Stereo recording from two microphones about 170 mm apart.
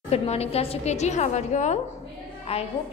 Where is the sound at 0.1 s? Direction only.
35° left (ahead or behind).